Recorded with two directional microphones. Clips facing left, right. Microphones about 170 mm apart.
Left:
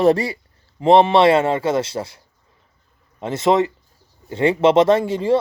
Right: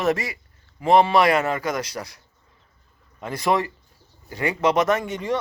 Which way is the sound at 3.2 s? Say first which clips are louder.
Left 6 dB; 25° left (ahead or behind).